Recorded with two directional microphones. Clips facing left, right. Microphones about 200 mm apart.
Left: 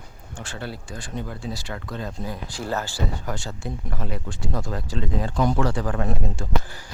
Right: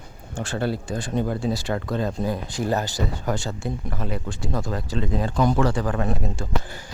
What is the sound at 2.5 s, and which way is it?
Speech, 15° right (ahead or behind).